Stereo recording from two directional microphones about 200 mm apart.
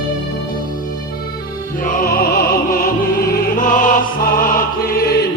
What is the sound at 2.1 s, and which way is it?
Music, 50° left (ahead or behind).